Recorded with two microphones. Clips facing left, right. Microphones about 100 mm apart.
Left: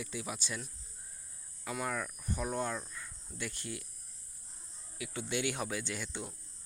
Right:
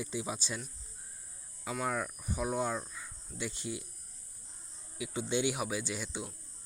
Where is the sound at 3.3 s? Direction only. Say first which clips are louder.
Right 3 dB; 20° right (ahead or behind).